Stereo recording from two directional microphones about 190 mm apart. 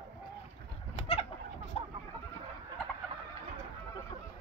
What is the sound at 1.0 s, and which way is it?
Bird, 30° left (ahead or behind).